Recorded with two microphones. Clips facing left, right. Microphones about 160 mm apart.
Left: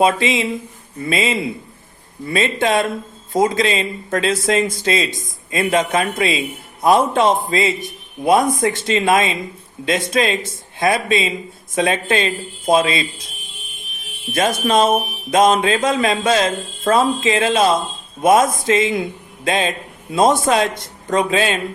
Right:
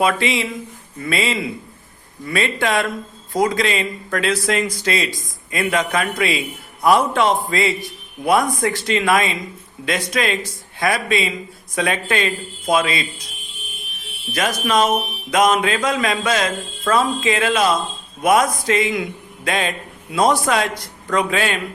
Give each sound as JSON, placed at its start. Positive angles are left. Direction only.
{"t": 0.0, "sound": "speech", "side_deg": 20}
{"t": 14.3, "sound": "speech", "side_deg": 25}